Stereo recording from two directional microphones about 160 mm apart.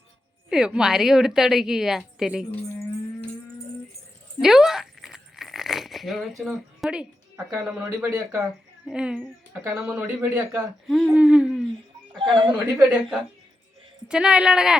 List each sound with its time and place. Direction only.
0.5 s a woman's voice: 5° right (ahead or behind)
2.5 s livestock: 10° left (ahead or behind)
4.4 s speech: 5° right (ahead or behind)
10.8 s a woman's voice: centre (ahead or behind)
12.2 s speech: 30° right (ahead or behind)
12.7 s a woman's voice: 5° right (ahead or behind)